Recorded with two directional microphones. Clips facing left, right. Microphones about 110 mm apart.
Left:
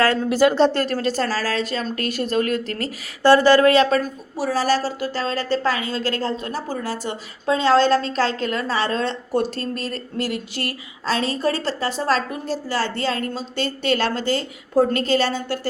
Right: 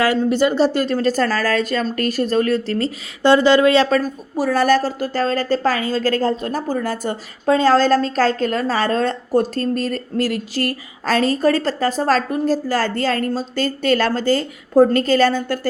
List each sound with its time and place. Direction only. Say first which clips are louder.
0.2 s speech: even; 5° left (ahead or behind)
1.0 s speech: right 4 dB; 45° right (ahead or behind); by 3.8 s 20° right (ahead or behind)
3.8 s a woman's voice: right 1 dB; 35° right (ahead or behind)